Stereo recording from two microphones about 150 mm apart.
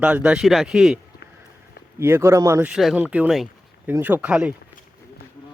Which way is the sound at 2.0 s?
15° right (ahead or behind).